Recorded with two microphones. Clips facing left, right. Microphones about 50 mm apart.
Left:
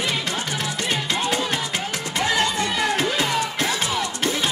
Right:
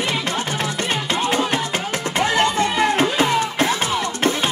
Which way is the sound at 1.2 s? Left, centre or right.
Right.